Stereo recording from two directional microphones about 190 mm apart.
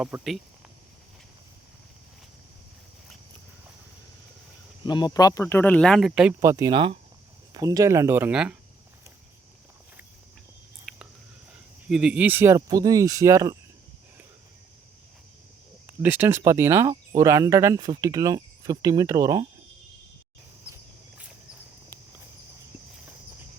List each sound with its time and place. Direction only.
0.0 s speech: 5° right (ahead or behind)
4.9 s speech: 20° left (ahead or behind); by 6.3 s 5° right (ahead or behind)
6.4 s speech: 15° right (ahead or behind)
10.9 s a sound: centre (ahead or behind)
11.9 s speech: 5° right (ahead or behind)
15.9 s speech: 10° right (ahead or behind)